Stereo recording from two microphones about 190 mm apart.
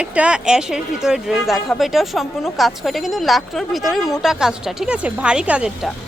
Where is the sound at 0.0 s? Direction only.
5° right (ahead or behind).